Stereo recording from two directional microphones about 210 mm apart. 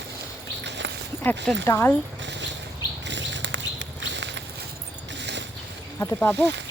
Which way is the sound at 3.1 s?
60° right (ahead or behind).